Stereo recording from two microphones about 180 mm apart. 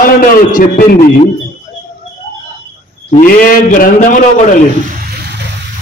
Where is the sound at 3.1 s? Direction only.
50° left (ahead or behind).